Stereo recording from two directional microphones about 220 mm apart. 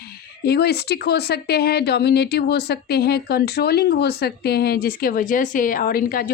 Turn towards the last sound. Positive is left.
turn(degrees=40)  # may be behind; listen again after turning